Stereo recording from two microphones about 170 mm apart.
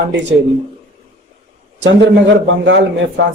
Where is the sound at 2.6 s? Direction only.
90° right.